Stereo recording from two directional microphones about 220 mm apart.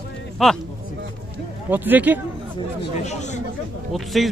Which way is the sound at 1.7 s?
10° right (ahead or behind).